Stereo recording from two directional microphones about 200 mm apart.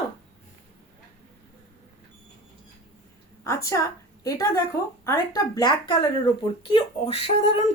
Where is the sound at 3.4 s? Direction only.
15° left (ahead or behind).